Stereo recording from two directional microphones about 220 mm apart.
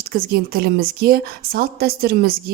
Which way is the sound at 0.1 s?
45° right (ahead or behind).